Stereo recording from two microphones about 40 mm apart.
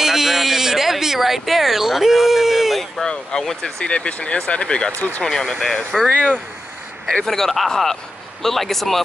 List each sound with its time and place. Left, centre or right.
0.0 s a sound: centre
3.1 s speech: centre
3.8 s speech: left
4.9 s speech: left
5.3 s speech: centre
7.2 s speech: centre